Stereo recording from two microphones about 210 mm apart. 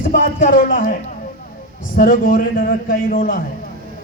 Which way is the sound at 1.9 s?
40° left (ahead or behind).